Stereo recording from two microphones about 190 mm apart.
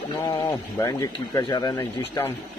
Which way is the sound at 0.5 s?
20° left (ahead or behind).